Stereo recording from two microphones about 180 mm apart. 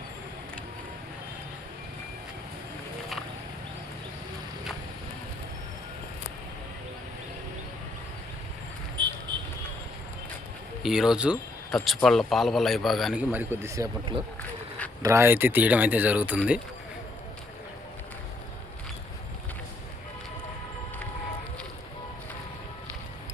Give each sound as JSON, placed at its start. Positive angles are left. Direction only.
{"t": 9.0, "sound": "vehicle", "side_deg": -25}
{"t": 10.8, "sound": "a man's voice", "side_deg": -5}
{"t": 15.0, "sound": "speech", "side_deg": -15}